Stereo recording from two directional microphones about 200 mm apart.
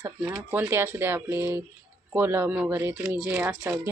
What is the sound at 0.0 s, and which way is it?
Speech, 10° right (ahead or behind).